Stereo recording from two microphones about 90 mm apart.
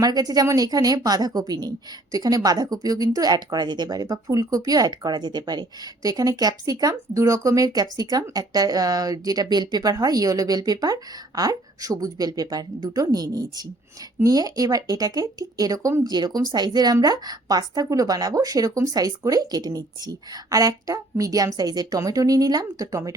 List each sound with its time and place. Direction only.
0.0 s speech: 45° right (ahead or behind)